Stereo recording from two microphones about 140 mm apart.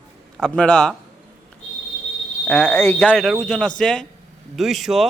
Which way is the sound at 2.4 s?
10° left (ahead or behind).